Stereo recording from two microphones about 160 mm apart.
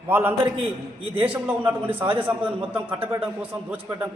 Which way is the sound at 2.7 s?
30° right (ahead or behind).